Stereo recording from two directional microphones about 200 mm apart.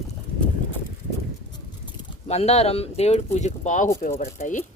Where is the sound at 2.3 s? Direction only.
30° left (ahead or behind).